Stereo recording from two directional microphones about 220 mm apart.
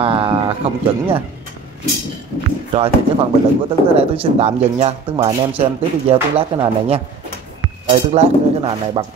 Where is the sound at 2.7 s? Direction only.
25° right (ahead or behind).